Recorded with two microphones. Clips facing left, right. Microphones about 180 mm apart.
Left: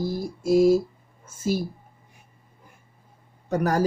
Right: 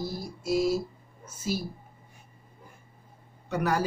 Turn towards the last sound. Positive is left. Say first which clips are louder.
# left 4 dB
turn(degrees=40)  # may be behind; listen again after turning